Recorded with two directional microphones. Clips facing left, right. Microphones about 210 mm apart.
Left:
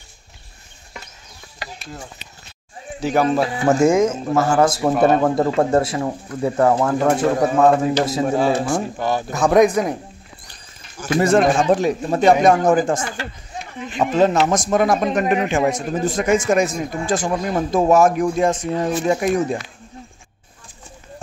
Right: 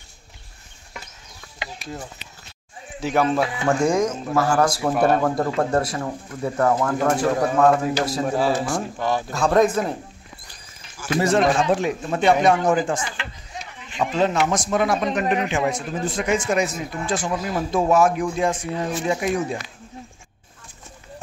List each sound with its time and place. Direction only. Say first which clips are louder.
3.0 s speech: left 2 dB; centre (ahead or behind)
3.3 s speech: left 4 dB; 30° left (ahead or behind)
7.1 s a man's voice: left 3 dB; 15° left (ahead or behind)
8.4 s a man's voice: left 2 dB; centre (ahead or behind)
9.3 s a man's voice: left 4 dB; 15° left (ahead or behind)
11.0 s speech: left 4 dB; 50° left (ahead or behind)